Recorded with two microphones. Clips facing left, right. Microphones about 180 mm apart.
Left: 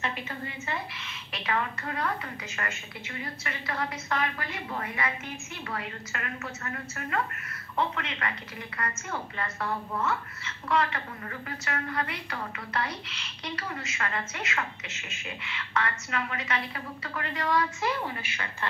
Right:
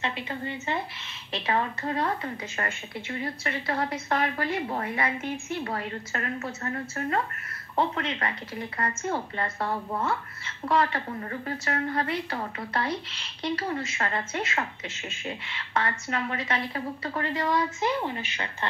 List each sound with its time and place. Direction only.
1.3 s a woman's voice: 30° right (ahead or behind)